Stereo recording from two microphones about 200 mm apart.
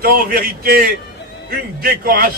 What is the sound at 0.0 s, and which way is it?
A man's voice, 50° right (ahead or behind).